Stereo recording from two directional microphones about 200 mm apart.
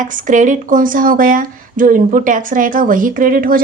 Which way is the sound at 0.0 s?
40° right (ahead or behind).